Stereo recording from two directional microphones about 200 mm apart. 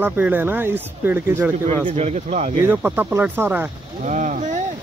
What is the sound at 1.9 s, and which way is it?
Speech, 35° right (ahead or behind).